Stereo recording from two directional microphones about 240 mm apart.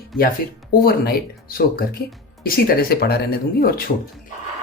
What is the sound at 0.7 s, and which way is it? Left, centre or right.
Speech, left.